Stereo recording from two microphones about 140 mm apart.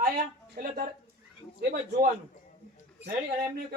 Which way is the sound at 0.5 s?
90° right.